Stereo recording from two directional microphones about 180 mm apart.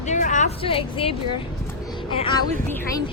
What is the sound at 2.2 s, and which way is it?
Speech, 25° left (ahead or behind).